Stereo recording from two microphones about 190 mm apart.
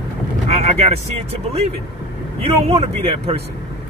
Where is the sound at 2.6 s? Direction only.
35° right (ahead or behind).